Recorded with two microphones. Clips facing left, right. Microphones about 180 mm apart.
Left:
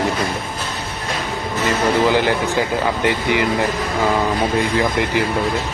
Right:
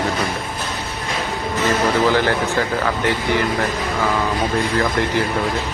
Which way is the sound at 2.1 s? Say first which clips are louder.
Left 1 dB; 15° left (ahead or behind).